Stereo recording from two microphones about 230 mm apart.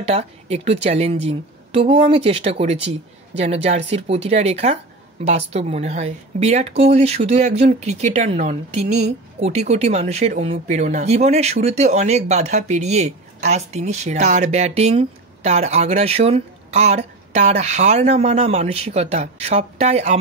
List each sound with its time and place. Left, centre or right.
0.0 s speech: right